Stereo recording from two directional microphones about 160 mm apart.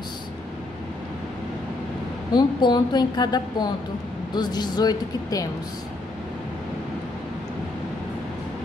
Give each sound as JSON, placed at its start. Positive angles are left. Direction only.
{"t": 2.3, "sound": "speech", "side_deg": 25}